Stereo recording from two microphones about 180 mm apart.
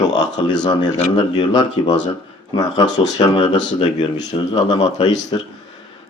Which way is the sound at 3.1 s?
25° left (ahead or behind).